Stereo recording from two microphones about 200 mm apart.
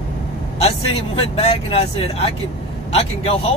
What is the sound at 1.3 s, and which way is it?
Speech, 30° left (ahead or behind).